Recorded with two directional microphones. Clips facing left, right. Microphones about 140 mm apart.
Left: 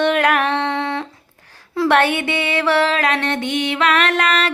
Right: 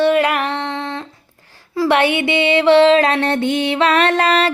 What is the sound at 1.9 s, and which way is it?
Music, 15° right (ahead or behind).